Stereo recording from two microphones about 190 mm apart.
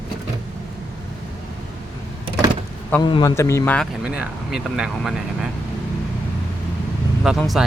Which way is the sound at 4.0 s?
5° right (ahead or behind).